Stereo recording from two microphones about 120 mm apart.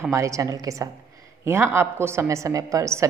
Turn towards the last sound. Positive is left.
turn(degrees=-25)  # may be behind; listen again after turning